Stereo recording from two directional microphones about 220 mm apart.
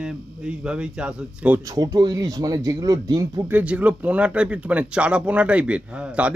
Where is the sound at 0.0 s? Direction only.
5° right (ahead or behind).